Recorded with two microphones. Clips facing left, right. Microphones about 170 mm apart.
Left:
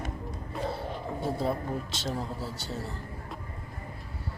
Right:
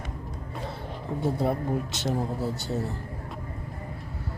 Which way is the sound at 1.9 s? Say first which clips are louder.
Right 5 dB; 20° right (ahead or behind).